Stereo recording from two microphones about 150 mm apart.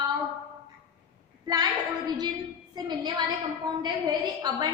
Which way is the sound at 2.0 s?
25° right (ahead or behind).